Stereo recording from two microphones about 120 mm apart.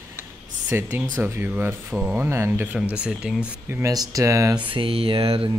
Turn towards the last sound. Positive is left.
turn(degrees=-50)  # may be behind; listen again after turning